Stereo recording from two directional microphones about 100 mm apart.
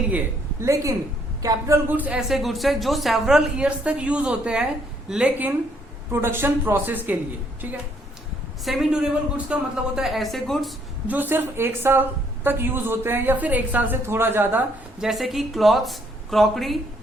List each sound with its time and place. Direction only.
0.6 s a man's voice: 30° right (ahead or behind)
1.9 s a woman's voice: 15° right (ahead or behind)
2.3 s a woman's voice: centre (ahead or behind)
6.1 s a woman's voice: 25° right (ahead or behind)
8.6 s a woman's voice: centre (ahead or behind)
11.1 s a woman's voice: 20° right (ahead or behind)
15.0 s a woman's voice: centre (ahead or behind)